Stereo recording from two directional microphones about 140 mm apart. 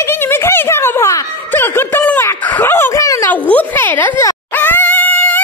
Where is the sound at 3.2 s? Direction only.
10° left (ahead or behind).